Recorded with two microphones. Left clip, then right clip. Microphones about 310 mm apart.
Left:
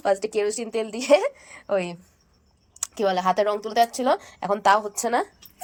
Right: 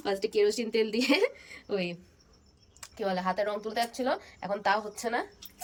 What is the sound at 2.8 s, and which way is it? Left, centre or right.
Speech, left.